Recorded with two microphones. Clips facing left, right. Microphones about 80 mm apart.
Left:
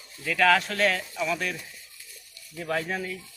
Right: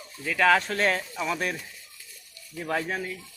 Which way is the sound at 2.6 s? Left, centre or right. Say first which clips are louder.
Even; centre.